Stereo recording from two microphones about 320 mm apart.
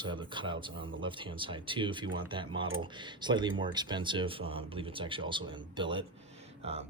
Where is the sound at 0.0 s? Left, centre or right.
Centre.